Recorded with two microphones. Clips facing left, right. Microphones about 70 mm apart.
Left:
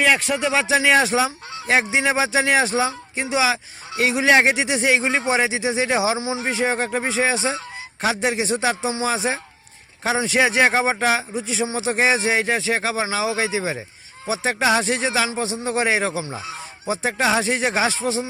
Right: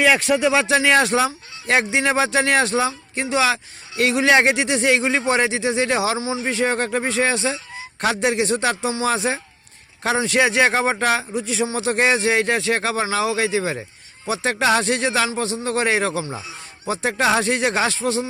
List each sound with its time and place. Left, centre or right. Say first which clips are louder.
0.0 s fowl: right 3 dB; centre
5.3 s speech: right 1 dB; centre
8.0 s fowl: right 2 dB; centre
15.4 s speech: right 1 dB; centre
16.8 s fowl: right 1 dB; centre